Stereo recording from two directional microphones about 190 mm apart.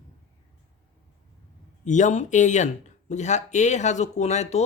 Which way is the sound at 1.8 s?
40° left (ahead or behind).